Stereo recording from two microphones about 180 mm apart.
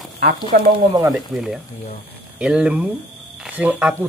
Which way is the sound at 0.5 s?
60° right (ahead or behind).